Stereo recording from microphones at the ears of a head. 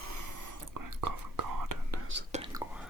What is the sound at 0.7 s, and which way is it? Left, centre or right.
Whispering, right.